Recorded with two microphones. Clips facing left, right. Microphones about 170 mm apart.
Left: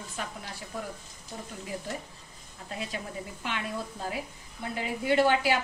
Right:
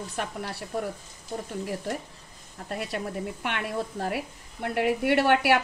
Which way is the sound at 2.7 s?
65° right (ahead or behind).